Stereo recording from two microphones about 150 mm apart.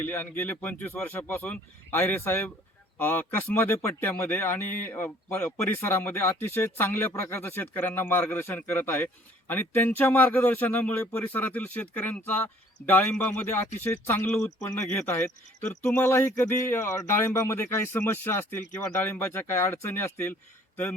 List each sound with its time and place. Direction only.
0.0 s speech: 10° left (ahead or behind)